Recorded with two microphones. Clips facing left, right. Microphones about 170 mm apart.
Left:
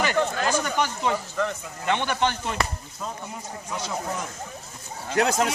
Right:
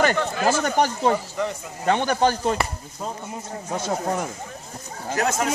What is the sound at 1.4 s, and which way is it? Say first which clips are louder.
Speech: right 1 dB; 15° right (ahead or behind).